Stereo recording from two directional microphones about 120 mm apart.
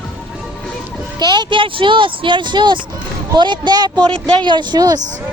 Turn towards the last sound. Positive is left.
turn(degrees=-35)  # may be behind; listen again after turning